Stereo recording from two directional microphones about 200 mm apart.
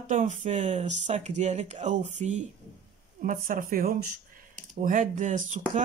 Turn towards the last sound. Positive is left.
turn(degrees=-40)  # may be behind; listen again after turning